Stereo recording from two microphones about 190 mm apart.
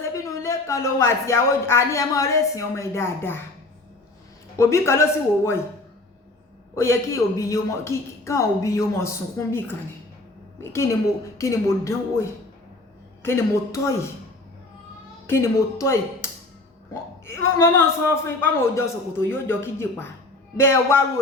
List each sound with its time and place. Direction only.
0.0 s speech: 15° left (ahead or behind)
4.5 s speech: 15° left (ahead or behind)
6.7 s a woman's voice: 15° left (ahead or behind)
13.2 s speech: 15° left (ahead or behind)
15.3 s speech: 15° left (ahead or behind)